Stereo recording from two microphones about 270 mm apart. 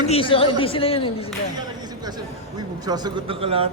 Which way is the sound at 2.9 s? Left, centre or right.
Centre.